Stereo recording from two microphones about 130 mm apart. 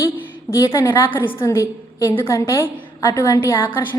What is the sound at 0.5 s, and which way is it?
A woman's voice, 20° left (ahead or behind).